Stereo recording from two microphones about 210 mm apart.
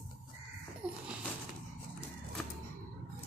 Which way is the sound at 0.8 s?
5° right (ahead or behind).